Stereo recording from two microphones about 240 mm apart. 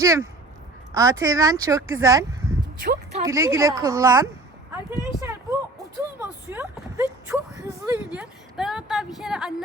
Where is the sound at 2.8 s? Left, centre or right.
Right.